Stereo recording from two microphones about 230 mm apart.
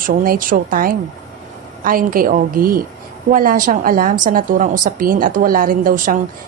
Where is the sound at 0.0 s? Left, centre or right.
Right.